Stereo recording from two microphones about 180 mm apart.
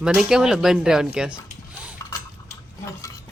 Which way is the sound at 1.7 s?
5° right (ahead or behind).